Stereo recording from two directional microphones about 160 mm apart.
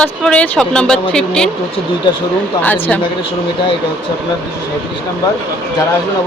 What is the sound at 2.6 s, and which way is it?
Speech, 10° left (ahead or behind).